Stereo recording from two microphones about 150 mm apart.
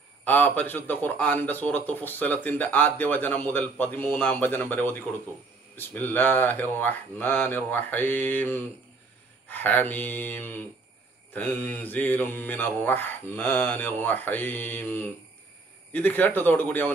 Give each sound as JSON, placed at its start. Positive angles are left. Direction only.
{"t": 0.2, "sound": "a man's voice", "side_deg": 10}